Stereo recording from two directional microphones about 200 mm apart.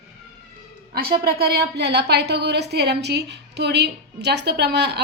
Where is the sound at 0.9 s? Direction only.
50° right (ahead or behind).